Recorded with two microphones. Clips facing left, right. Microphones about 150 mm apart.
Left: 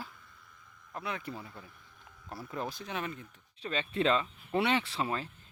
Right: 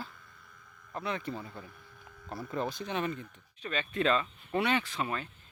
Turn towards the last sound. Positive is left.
turn(degrees=30)  # may be behind; listen again after turning